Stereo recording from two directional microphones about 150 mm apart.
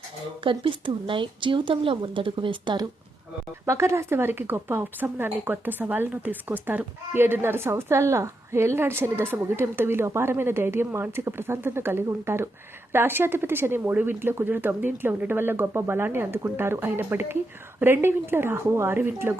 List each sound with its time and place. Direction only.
0.4 s speech: 35° right (ahead or behind)
3.7 s speech: 20° right (ahead or behind)